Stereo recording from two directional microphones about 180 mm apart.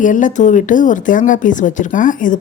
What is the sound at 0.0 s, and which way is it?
Speech, 45° left (ahead or behind).